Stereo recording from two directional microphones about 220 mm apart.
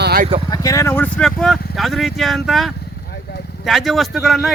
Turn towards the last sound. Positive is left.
turn(degrees=0)  # may be behind; listen again after turning